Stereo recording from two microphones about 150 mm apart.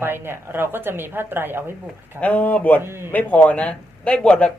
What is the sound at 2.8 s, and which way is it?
Speech, 15° right (ahead or behind).